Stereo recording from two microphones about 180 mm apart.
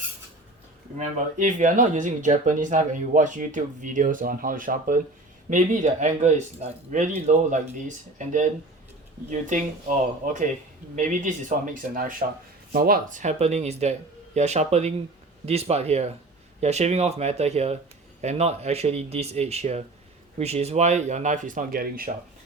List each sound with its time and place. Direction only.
0.9 s speech: 40° right (ahead or behind)